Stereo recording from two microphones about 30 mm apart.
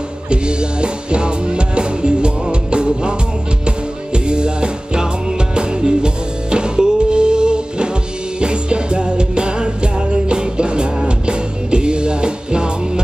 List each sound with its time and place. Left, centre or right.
0.3 s music: right